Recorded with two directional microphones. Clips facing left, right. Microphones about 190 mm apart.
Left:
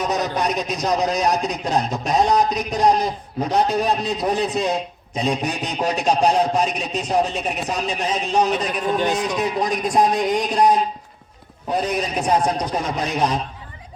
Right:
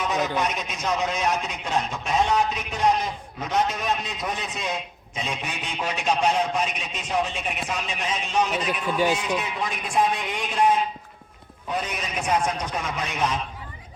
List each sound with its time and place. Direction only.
0.0 s a man's voice: 40° left (ahead or behind)